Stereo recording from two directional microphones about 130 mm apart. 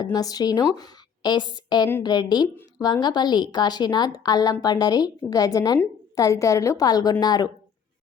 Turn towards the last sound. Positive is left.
turn(degrees=30)  # may be behind; listen again after turning